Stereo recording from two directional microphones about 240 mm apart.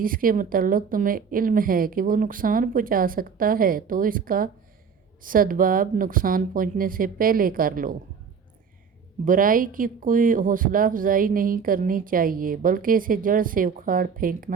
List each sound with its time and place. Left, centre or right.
0.0 s speech: right
9.2 s speech: right